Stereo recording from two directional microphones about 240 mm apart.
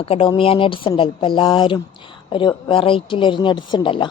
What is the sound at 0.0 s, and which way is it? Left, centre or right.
A woman's voice, left.